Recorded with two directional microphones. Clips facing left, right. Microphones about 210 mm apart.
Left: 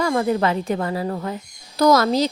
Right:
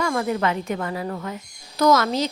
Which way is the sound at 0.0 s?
35° left (ahead or behind).